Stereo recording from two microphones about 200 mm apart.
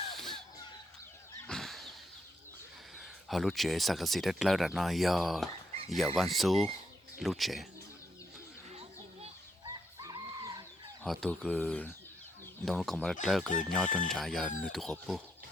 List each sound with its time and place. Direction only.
1.5 s a sound: centre (ahead or behind)
3.0 s speech: centre (ahead or behind)
8.7 s children playing: 30° right (ahead or behind)
9.6 s chicken: 15° right (ahead or behind)
11.0 s speech: centre (ahead or behind)